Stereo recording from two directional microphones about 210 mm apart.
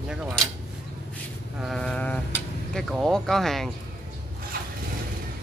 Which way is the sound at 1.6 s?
Centre (ahead or behind).